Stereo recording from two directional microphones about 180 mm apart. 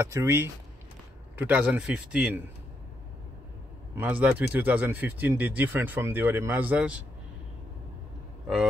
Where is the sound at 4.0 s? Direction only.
10° right (ahead or behind).